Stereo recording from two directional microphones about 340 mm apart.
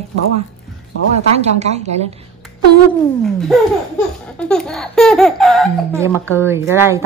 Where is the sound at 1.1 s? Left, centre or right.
Centre.